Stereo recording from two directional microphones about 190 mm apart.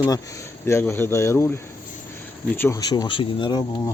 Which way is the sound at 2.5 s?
15° left (ahead or behind).